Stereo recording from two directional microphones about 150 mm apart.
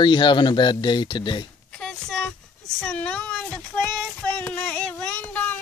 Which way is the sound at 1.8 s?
5° left (ahead or behind).